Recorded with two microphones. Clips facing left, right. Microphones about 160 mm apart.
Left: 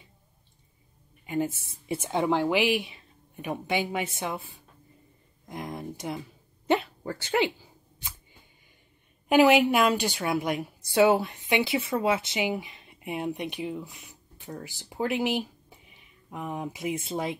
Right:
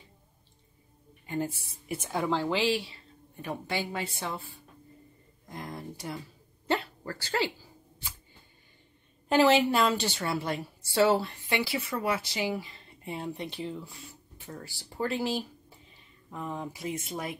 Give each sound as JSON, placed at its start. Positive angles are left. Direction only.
{"t": 1.2, "sound": "a woman's voice", "side_deg": 15}
{"t": 5.5, "sound": "a sound", "side_deg": 20}
{"t": 6.7, "sound": "speech", "side_deg": 20}
{"t": 9.3, "sound": "a woman's voice", "side_deg": 15}